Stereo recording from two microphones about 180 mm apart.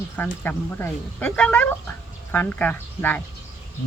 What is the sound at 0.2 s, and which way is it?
Speech, 10° left (ahead or behind).